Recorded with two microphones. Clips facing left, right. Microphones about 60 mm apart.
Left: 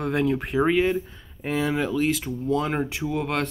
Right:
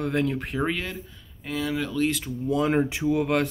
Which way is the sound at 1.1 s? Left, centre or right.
Left.